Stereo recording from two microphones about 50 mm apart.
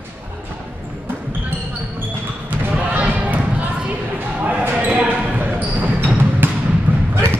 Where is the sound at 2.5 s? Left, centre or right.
Right.